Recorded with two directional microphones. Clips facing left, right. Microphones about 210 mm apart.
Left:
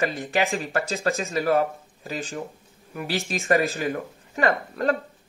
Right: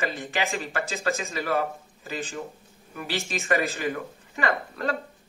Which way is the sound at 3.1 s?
40° left (ahead or behind).